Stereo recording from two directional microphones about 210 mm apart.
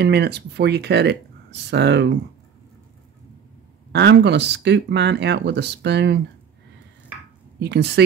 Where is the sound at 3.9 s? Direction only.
55° right (ahead or behind).